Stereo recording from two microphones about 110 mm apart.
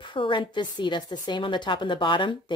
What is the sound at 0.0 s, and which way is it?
A woman's voice, 50° left (ahead or behind).